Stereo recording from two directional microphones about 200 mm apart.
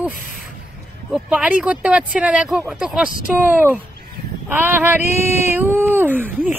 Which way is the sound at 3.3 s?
10° right (ahead or behind).